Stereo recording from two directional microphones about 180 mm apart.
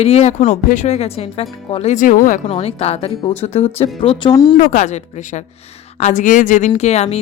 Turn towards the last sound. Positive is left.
turn(degrees=35)  # may be behind; listen again after turning